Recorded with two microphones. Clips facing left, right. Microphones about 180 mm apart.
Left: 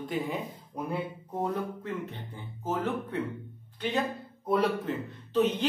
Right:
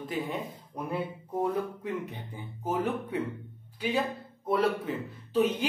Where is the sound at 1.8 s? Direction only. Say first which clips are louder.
Right 1 dB; 15° right (ahead or behind).